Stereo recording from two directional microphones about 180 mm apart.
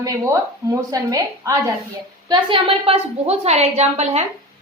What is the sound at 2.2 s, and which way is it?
A woman's voice, 30° right (ahead or behind).